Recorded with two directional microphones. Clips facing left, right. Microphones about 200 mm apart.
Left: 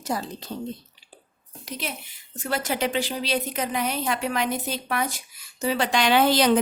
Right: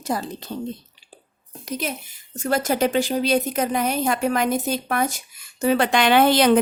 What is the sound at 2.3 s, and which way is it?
A woman's voice, 45° right (ahead or behind).